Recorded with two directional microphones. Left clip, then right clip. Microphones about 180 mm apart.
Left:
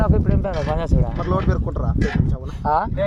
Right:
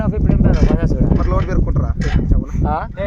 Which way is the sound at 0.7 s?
20° left (ahead or behind).